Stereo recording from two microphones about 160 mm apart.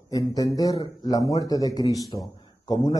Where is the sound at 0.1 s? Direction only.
20° left (ahead or behind).